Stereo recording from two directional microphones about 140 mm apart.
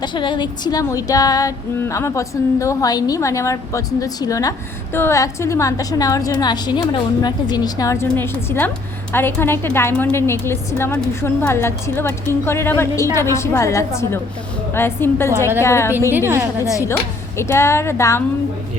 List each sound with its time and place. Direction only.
0.0 s female singing: 35° left (ahead or behind); by 8.7 s 15° left (ahead or behind)
9.1 s a woman's voice: 15° left (ahead or behind)
13.1 s female singing: 20° left (ahead or behind)
14.7 s a woman's voice: 15° left (ahead or behind)
15.6 s female singing: 20° left (ahead or behind)
16.1 s a woman's voice: 15° right (ahead or behind)
16.6 s female singing: 20° left (ahead or behind)